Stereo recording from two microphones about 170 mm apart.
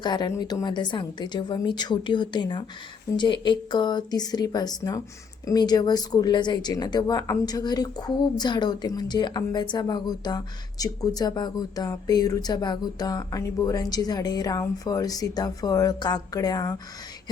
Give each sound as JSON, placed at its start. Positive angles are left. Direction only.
{"t": 0.0, "sound": "speech", "side_deg": 25}